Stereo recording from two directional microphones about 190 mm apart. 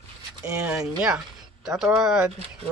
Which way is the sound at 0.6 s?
5° right (ahead or behind).